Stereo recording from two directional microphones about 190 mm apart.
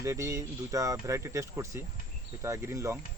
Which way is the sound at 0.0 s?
15° right (ahead or behind).